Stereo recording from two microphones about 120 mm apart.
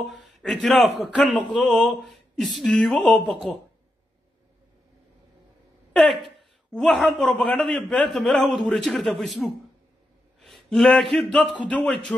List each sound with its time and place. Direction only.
0.0 s a man's voice: centre (ahead or behind)
5.9 s a man's voice: centre (ahead or behind)
10.4 s a sound: centre (ahead or behind)
11.3 s speech: 10° left (ahead or behind)